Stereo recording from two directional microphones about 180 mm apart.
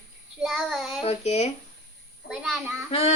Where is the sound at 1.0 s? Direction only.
35° left (ahead or behind).